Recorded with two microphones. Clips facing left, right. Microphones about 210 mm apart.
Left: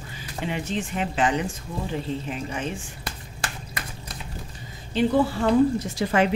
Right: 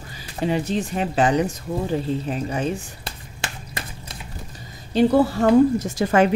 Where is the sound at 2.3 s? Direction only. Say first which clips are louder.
Right 5 dB; 35° right (ahead or behind).